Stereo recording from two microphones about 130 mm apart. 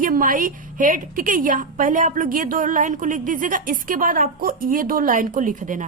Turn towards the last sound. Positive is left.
turn(degrees=-85)